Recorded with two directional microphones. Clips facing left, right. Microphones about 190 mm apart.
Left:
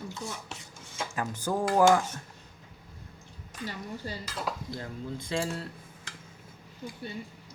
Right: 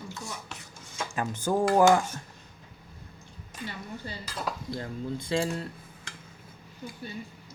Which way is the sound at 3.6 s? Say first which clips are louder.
Left 1 dB; 40° left (ahead or behind).